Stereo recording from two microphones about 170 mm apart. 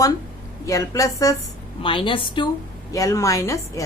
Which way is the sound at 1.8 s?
30° left (ahead or behind).